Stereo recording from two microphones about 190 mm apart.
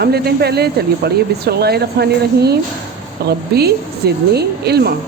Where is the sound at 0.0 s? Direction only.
55° right (ahead or behind).